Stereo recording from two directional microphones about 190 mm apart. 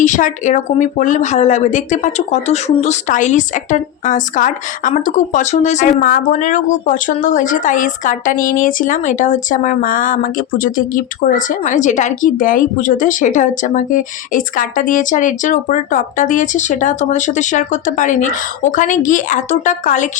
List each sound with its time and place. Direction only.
0.0 s speech: 40° left (ahead or behind)